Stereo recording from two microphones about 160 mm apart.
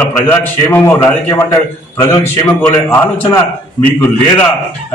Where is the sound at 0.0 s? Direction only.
10° left (ahead or behind).